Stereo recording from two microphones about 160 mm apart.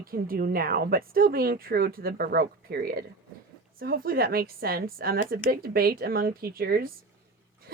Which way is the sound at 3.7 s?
65° right (ahead or behind).